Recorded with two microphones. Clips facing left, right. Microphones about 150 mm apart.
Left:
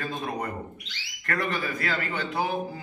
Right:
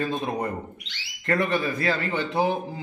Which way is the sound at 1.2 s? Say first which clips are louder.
Right 5 dB; 25° right (ahead or behind).